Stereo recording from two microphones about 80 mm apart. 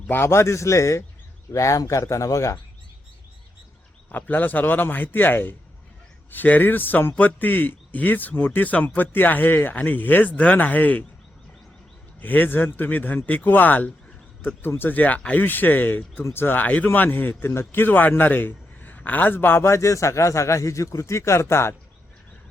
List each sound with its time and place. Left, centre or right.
0.1 s speech: left
4.1 s speech: left
12.2 s speech: left